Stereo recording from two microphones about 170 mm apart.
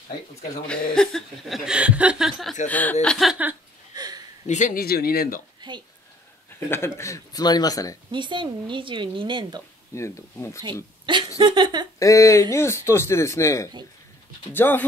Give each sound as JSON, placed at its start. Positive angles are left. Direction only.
{"t": 0.9, "sound": "a woman's voice", "side_deg": 0}
{"t": 2.7, "sound": "a woman's voice", "side_deg": 10}
{"t": 3.9, "sound": "a sound", "side_deg": -20}
{"t": 4.5, "sound": "speech", "side_deg": 45}
{"t": 5.6, "sound": "a woman's voice", "side_deg": -25}
{"t": 6.7, "sound": "speech", "side_deg": 15}
{"t": 8.1, "sound": "speech", "side_deg": -30}
{"t": 9.9, "sound": "a man's voice", "side_deg": 15}
{"t": 11.1, "sound": "speech", "side_deg": -30}
{"t": 12.0, "sound": "a man's voice", "side_deg": 20}